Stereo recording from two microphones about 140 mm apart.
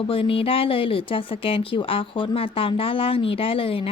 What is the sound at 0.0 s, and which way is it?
A woman's voice, 40° left (ahead or behind).